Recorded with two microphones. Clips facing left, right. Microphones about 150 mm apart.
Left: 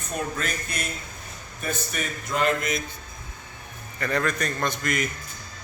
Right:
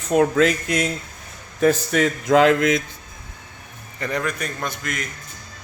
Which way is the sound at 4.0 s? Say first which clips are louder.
Even; 15° right (ahead or behind).